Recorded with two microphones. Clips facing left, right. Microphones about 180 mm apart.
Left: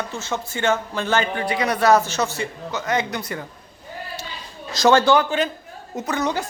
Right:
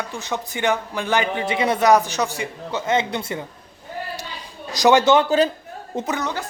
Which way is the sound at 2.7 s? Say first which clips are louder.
Right 3 dB; 25° right (ahead or behind).